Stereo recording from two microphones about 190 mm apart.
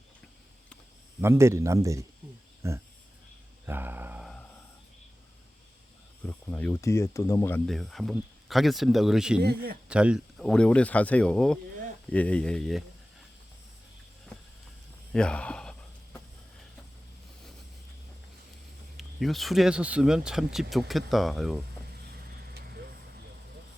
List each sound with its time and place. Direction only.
1.2 s speech: 15° right (ahead or behind)
3.7 s a sound: 10° right (ahead or behind)
6.2 s speech: 10° left (ahead or behind)
7.7 s speech: centre (ahead or behind)
9.4 s speech: 60° right (ahead or behind)
9.9 s speech: 5° right (ahead or behind)
15.1 s speech: 5° left (ahead or behind)
18.9 s speech: centre (ahead or behind)